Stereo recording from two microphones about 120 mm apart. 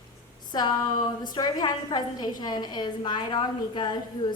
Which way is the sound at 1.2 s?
35° left (ahead or behind).